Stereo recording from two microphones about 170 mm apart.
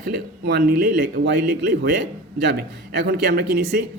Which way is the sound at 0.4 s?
70° right (ahead or behind).